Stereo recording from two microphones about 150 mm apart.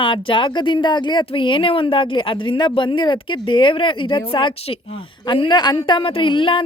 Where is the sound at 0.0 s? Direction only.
35° left (ahead or behind).